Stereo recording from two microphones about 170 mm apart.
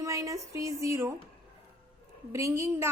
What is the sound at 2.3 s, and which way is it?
Speech, 15° right (ahead or behind).